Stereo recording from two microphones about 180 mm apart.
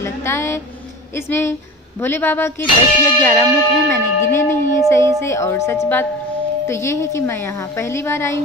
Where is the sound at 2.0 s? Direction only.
10° left (ahead or behind).